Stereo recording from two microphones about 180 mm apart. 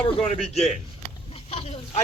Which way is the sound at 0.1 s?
35° left (ahead or behind).